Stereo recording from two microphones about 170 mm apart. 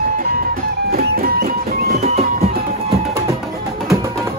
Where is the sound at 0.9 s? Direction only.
65° right (ahead or behind).